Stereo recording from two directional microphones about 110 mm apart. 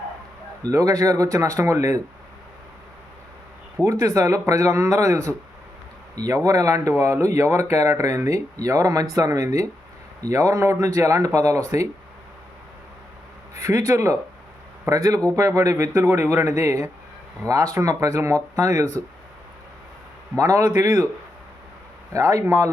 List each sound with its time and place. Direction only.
0.6 s speech: 30° right (ahead or behind)
4.0 s speech: 30° right (ahead or behind)
13.6 s speech: 30° right (ahead or behind)
20.3 s speech: 30° right (ahead or behind)
22.1 s speech: 30° right (ahead or behind)